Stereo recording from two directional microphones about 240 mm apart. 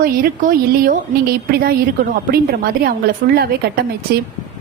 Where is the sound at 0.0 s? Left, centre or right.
Right.